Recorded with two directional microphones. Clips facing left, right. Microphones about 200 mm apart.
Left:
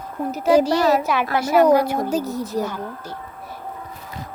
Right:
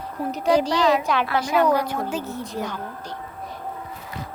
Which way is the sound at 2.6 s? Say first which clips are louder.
Left 3 dB; 5° left (ahead or behind).